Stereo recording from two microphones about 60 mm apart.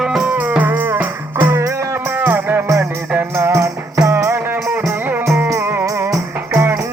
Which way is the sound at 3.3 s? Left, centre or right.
Right.